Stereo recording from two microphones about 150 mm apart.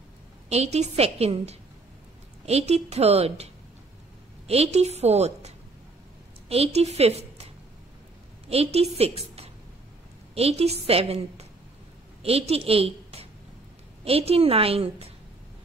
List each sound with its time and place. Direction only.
0.5 s a woman's voice: 45° right (ahead or behind)
6.5 s a woman's voice: 45° right (ahead or behind)
8.5 s a woman's voice: 45° right (ahead or behind)